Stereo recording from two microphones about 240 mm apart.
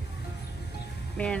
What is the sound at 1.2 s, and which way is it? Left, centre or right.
Speech, centre.